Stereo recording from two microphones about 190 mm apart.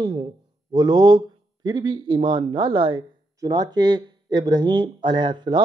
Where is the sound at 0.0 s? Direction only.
30° right (ahead or behind).